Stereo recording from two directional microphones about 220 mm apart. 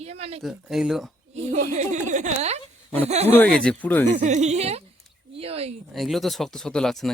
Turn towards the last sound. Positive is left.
turn(degrees=0)  # may be behind; listen again after turning